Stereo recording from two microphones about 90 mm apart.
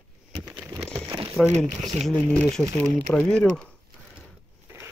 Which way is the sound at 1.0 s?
60° right (ahead or behind).